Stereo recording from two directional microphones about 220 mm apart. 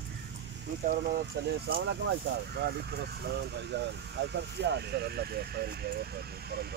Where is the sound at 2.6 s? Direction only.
45° right (ahead or behind).